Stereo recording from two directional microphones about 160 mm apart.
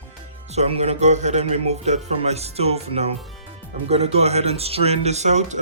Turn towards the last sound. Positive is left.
turn(degrees=-45)  # may be behind; listen again after turning